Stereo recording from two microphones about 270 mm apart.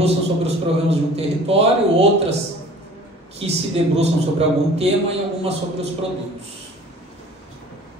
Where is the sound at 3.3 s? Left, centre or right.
Right.